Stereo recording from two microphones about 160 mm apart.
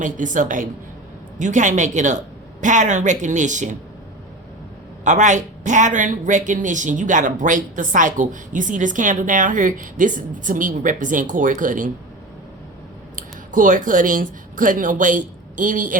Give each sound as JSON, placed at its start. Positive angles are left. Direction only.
{"t": 0.0, "sound": "a woman's voice", "side_deg": -55}
{"t": 5.0, "sound": "speech", "side_deg": -50}
{"t": 13.1, "sound": "speech", "side_deg": -55}